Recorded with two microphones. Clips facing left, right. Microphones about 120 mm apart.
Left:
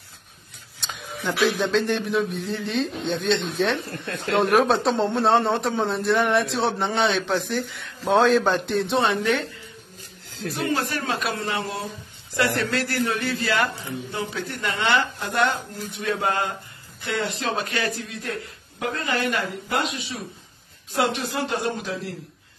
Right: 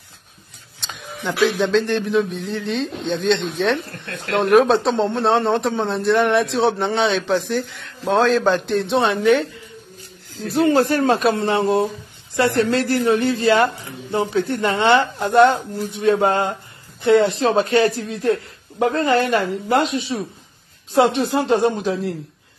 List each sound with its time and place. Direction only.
0.9 s a sound: centre (ahead or behind)
1.6 s a man's voice: centre (ahead or behind)
10.5 s speech: 35° right (ahead or behind)